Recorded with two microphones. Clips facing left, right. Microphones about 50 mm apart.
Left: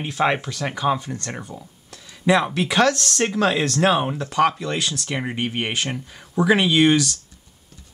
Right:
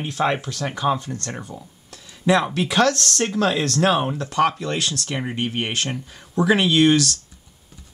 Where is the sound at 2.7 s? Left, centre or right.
Centre.